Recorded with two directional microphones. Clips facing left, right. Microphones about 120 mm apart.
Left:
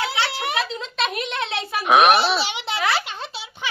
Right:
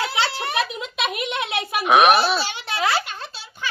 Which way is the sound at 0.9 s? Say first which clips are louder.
Even; 5° right (ahead or behind).